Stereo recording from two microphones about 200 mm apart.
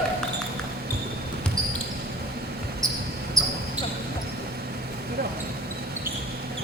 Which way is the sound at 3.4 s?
15° right (ahead or behind).